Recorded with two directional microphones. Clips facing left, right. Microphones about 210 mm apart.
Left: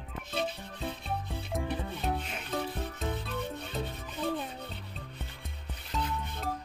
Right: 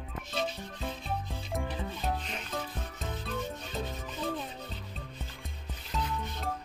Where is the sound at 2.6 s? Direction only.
60° left (ahead or behind).